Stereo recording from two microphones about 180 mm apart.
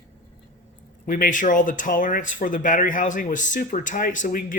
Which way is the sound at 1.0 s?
50° left (ahead or behind).